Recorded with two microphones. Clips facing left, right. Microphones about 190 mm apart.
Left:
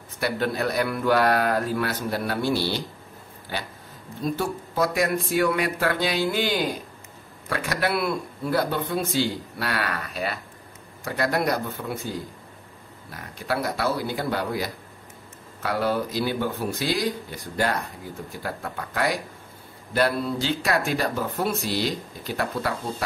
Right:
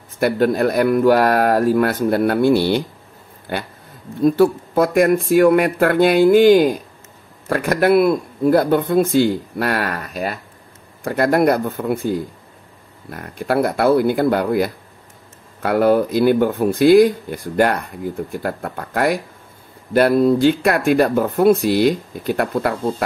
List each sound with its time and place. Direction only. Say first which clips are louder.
0.2 s speech: right 9 dB; 50° right (ahead or behind)